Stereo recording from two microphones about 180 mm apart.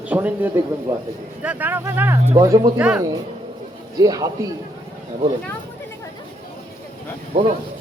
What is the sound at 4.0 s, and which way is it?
Speech, 20° right (ahead or behind).